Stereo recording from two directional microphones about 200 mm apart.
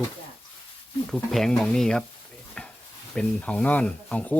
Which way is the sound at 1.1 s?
Centre (ahead or behind).